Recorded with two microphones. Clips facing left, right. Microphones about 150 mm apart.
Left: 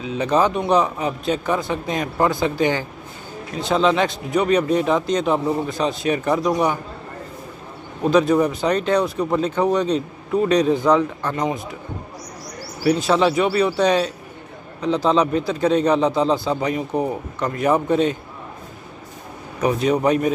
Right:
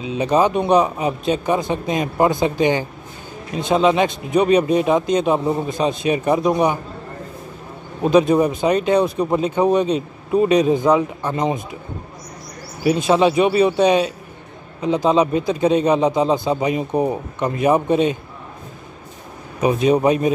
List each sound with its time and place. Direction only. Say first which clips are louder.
0.0 s speech: right 2 dB; 15° right (ahead or behind)
8.0 s speech: right 2 dB; 15° right (ahead or behind)
11.3 s speech: right 3 dB; 25° right (ahead or behind)
12.8 s speech: right 2 dB; 20° right (ahead or behind)
19.6 s speech: right 3 dB; 15° right (ahead or behind)